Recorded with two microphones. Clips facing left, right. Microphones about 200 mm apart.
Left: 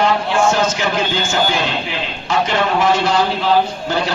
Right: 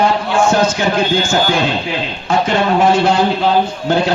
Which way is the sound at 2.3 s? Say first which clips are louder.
Right 3 dB; 55° right (ahead or behind).